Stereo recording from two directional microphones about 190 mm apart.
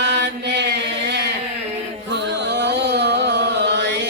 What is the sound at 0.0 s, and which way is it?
Chant, 65° right (ahead or behind).